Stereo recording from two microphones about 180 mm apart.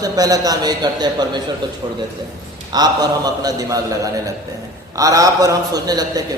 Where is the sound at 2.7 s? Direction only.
20° right (ahead or behind).